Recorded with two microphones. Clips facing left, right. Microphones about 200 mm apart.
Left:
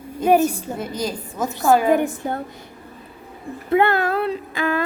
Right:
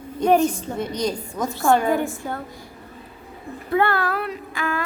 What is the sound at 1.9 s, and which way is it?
Speech, 20° left (ahead or behind).